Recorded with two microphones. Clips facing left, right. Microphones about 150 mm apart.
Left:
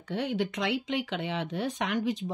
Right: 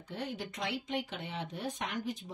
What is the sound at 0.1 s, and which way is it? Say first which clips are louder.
Speech: left 9 dB; 85° left.